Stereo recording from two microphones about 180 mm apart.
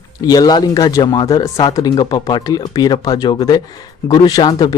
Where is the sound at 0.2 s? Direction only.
20° left (ahead or behind).